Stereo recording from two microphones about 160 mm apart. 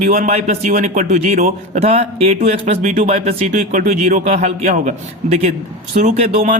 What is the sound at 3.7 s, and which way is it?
A man's voice, 50° right (ahead or behind).